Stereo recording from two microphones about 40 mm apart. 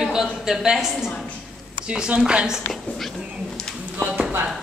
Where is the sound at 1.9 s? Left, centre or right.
Right.